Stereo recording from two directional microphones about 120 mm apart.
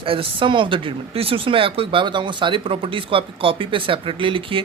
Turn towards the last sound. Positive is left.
turn(degrees=-45)  # may be behind; listen again after turning